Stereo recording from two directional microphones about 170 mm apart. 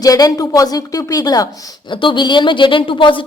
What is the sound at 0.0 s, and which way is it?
A woman's voice, 20° left (ahead or behind).